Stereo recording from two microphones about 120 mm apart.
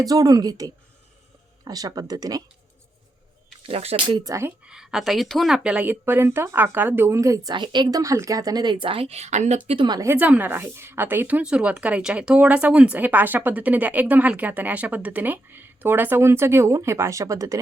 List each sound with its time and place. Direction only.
0.0 s speech: 30° right (ahead or behind)
3.6 s speech: 55° right (ahead or behind)
4.2 s speech: 25° right (ahead or behind)
4.6 s a woman's voice: 5° right (ahead or behind); by 7.5 s 25° right (ahead or behind)
7.5 s speech: 40° right (ahead or behind); by 9.6 s 75° right (ahead or behind)
9.6 s speech: 45° right (ahead or behind)
10.2 s a woman's voice: 15° right (ahead or behind)